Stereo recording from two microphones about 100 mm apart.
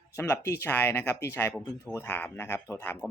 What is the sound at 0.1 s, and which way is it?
Speech, 25° left (ahead or behind).